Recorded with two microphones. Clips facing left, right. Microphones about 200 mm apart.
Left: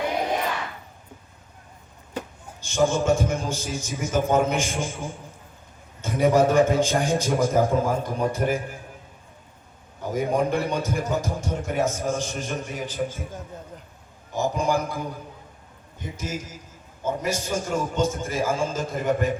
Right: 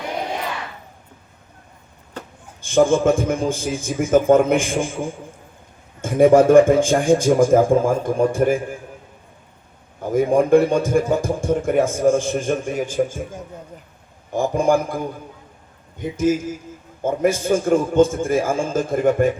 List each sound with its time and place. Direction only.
2.6 s a man's voice: 55° right (ahead or behind)
10.0 s a man's voice: 50° right (ahead or behind)
14.3 s a man's voice: 50° right (ahead or behind)
16.1 s a man's voice: 50° right (ahead or behind)